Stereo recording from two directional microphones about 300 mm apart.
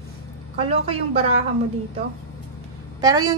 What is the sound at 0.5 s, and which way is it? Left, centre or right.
Speech, centre.